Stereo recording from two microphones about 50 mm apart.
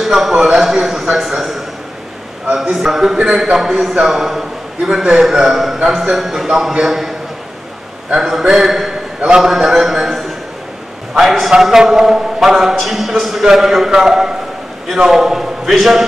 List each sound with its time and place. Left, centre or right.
0.1 s a man's voice: centre
2.4 s a sound: right
2.7 s a man's voice: centre
8.2 s a man's voice: centre